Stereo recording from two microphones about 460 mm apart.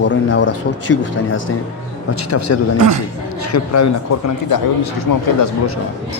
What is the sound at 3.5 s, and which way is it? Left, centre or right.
Speech, left.